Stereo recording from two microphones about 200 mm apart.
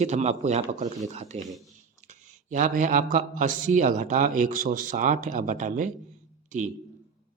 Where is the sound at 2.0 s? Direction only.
40° right (ahead or behind).